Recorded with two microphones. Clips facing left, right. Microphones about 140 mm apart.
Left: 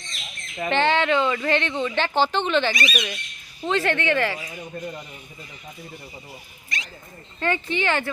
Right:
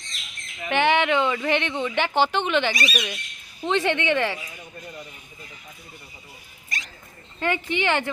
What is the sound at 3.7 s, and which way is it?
Speech, 20° right (ahead or behind).